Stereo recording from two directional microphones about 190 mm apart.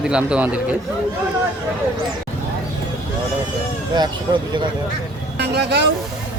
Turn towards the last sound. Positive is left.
turn(degrees=-60)  # may be behind; listen again after turning